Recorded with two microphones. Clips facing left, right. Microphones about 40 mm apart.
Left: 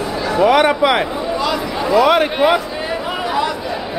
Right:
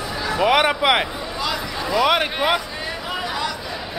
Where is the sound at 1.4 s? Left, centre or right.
Centre.